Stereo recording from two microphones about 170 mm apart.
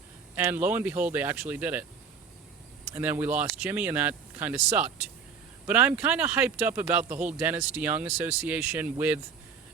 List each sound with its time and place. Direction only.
0.3 s speech: 10° right (ahead or behind)
2.9 s speech: 10° right (ahead or behind)